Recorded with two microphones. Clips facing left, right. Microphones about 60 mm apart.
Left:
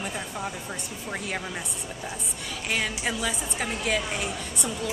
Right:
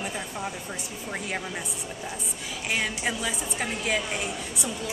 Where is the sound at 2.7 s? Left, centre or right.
Centre.